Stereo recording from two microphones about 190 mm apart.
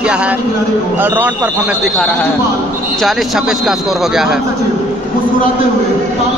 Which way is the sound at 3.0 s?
Centre (ahead or behind).